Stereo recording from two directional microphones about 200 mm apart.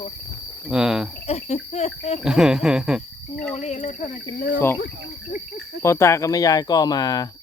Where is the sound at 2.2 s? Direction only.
5° right (ahead or behind).